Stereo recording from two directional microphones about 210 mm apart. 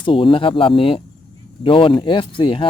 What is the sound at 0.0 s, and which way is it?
Speech, 25° left (ahead or behind).